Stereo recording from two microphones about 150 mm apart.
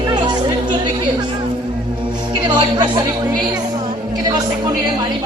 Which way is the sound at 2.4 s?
30° right (ahead or behind).